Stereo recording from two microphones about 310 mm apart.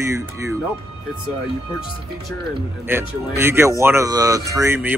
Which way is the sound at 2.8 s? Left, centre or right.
Centre.